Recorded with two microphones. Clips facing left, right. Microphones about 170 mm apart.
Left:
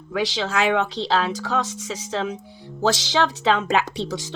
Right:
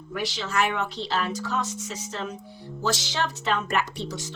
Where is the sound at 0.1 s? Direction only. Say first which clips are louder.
Left 6 dB; 90° left.